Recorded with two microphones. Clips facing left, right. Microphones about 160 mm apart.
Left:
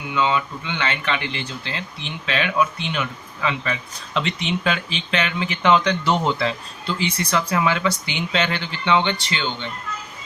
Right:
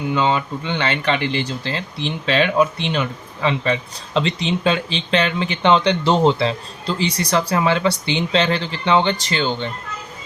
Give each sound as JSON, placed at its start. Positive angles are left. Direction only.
{"t": 0.1, "sound": "speech", "side_deg": -35}